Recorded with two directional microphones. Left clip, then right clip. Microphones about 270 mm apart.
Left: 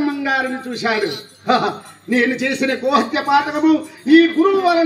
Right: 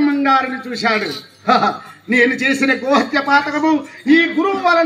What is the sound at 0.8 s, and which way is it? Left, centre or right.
A man's voice, right.